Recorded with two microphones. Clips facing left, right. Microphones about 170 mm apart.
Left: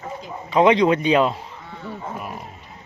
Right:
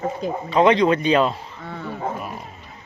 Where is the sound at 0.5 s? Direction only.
15° left (ahead or behind).